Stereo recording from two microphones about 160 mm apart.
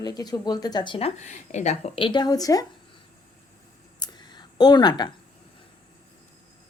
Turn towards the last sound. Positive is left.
turn(degrees=25)  # may be behind; listen again after turning